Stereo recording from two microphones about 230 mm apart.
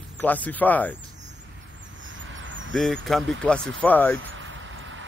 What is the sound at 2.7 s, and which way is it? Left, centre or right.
Speech, centre.